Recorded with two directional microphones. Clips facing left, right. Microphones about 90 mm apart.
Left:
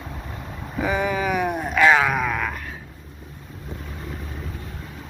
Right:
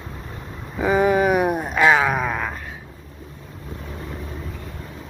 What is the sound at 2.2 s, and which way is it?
Wail, 25° right (ahead or behind).